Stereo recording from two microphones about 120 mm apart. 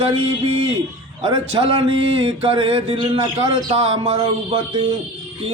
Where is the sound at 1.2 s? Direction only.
50° right (ahead or behind).